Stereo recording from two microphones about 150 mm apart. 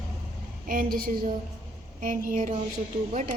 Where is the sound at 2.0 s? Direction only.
60° right (ahead or behind).